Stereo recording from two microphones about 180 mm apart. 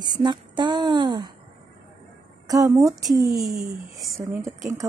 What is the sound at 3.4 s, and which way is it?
Speech, centre (ahead or behind).